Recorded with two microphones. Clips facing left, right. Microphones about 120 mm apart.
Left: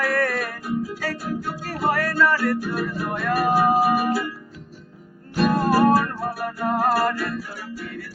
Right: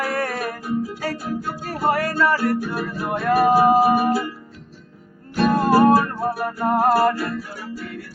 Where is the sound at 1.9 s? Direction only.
30° right (ahead or behind).